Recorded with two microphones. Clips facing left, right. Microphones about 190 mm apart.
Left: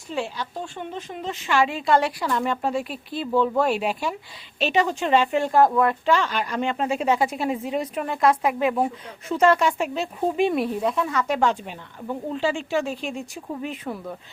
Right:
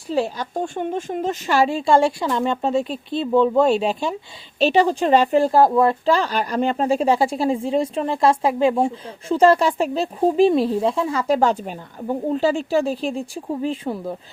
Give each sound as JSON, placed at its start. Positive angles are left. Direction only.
{"t": 0.1, "sound": "a woman's voice", "side_deg": -40}